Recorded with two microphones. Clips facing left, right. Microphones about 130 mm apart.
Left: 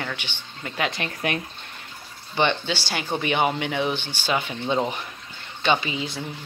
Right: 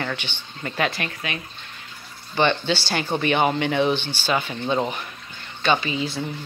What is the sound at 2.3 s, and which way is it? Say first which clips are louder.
Speech: right 2 dB; 15° left (ahead or behind).